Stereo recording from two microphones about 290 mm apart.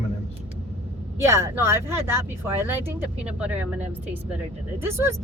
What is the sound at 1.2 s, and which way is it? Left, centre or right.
Speech, centre.